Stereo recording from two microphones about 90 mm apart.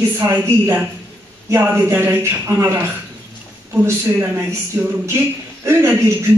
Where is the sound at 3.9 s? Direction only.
30° right (ahead or behind).